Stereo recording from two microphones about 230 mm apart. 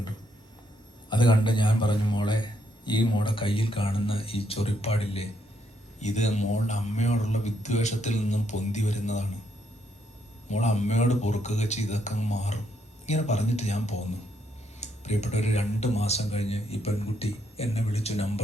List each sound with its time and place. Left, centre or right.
1.1 s a man's voice: centre
10.5 s a man's voice: left